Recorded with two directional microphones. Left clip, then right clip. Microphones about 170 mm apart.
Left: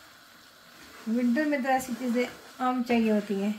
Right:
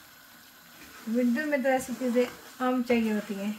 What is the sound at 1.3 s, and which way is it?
Speech, 20° left (ahead or behind).